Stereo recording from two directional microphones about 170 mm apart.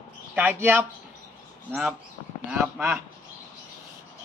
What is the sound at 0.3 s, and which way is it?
Speech, 10° right (ahead or behind).